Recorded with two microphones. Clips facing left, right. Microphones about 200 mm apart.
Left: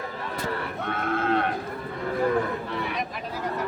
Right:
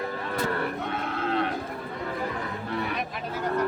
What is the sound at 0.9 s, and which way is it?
Livestock, 50° left (ahead or behind).